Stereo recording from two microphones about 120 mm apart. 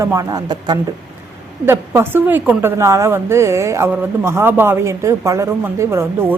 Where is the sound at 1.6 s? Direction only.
20° right (ahead or behind).